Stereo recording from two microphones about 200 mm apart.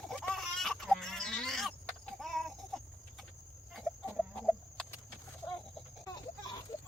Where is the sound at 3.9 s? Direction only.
Centre (ahead or behind).